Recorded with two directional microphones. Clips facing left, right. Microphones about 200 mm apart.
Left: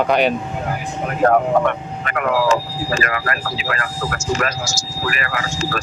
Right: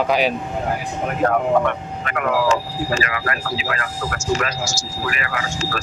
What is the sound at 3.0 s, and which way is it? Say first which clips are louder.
Speech: left 2 dB; 50° left (ahead or behind).